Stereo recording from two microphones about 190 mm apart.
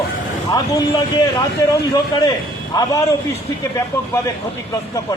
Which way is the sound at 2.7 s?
15° left (ahead or behind).